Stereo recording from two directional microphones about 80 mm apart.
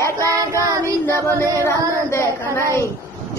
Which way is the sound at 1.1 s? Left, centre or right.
Left.